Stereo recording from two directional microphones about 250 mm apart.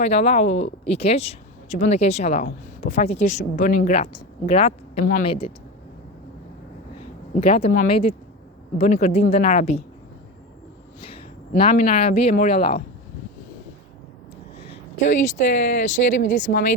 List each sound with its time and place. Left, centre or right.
0.0 s speech: left
7.4 s speech: left
11.0 s speech: left
15.0 s speech: left